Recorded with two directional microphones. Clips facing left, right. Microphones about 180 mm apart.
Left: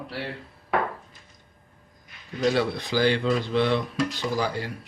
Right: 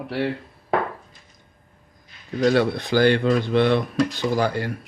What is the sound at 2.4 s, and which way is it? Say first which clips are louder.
Speech: right 5 dB; 55° right (ahead or behind).